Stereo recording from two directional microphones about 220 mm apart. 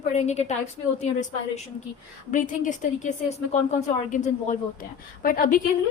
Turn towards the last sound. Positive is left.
turn(degrees=40)  # may be behind; listen again after turning